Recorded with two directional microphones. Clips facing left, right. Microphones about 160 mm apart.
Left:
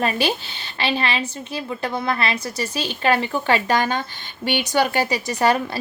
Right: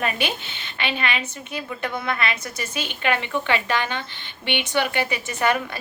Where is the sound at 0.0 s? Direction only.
35° left (ahead or behind).